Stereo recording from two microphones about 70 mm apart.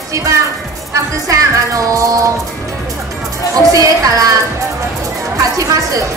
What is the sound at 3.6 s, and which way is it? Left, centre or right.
Music, right.